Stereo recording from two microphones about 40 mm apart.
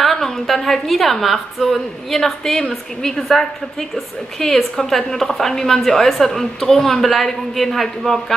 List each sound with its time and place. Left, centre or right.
0.0 s a woman's voice: centre